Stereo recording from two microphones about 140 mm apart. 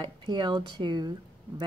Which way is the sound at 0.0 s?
35° right (ahead or behind).